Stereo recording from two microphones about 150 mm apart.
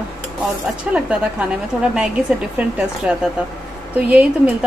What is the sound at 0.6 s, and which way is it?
Speech, 5° right (ahead or behind).